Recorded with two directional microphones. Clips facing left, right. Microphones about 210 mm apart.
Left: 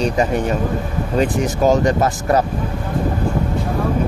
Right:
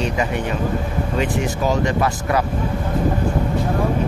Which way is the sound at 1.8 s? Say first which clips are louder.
Left 3 dB; 40° left (ahead or behind).